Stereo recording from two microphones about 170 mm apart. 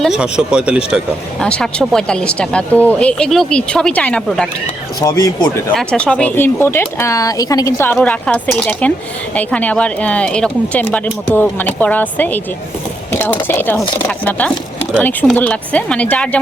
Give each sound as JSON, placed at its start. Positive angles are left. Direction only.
{"t": 0.0, "sound": "speech", "side_deg": -5}
{"t": 4.9, "sound": "speech", "side_deg": 20}
{"t": 5.7, "sound": "speech", "side_deg": 5}